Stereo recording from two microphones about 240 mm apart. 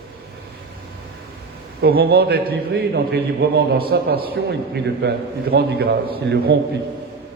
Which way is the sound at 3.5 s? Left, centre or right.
Right.